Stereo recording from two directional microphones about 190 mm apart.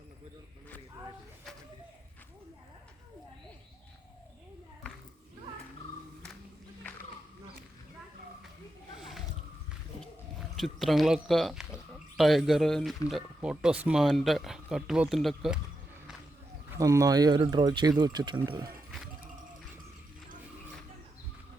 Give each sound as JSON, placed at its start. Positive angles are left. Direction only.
{"t": 9.0, "sound": "a sound", "side_deg": 0}
{"t": 10.6, "sound": "speech", "side_deg": 0}
{"t": 16.7, "sound": "speech", "side_deg": -15}
{"t": 18.9, "sound": "music", "side_deg": 0}